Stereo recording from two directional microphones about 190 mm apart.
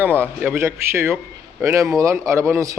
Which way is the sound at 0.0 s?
10° right (ahead or behind).